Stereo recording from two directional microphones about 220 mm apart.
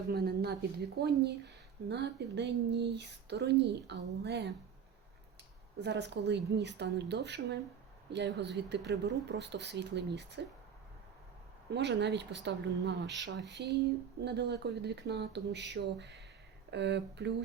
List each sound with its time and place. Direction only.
0.1 s speech: 45° right (ahead or behind)
5.8 s speech: 50° right (ahead or behind)
11.7 s speech: 50° right (ahead or behind)